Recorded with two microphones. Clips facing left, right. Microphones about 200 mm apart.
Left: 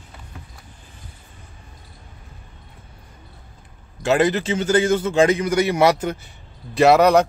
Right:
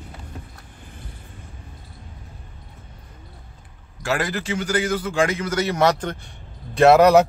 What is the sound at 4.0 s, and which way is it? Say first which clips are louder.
A man's voice: left 7 dB; 20° left (ahead or behind).